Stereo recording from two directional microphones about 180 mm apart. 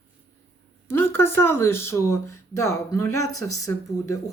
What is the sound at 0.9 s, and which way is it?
Speech, 15° left (ahead or behind).